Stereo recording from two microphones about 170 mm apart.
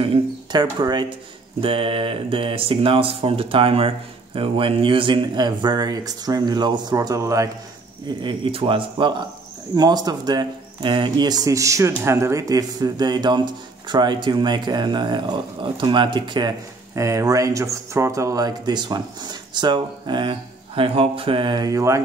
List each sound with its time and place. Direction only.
0.0 s speech: 30° right (ahead or behind)